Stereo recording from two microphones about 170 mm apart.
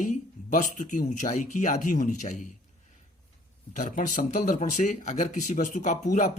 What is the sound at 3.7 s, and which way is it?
Speech, 50° left (ahead or behind).